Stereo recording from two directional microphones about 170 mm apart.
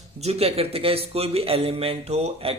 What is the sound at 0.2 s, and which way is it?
Speech, 40° right (ahead or behind).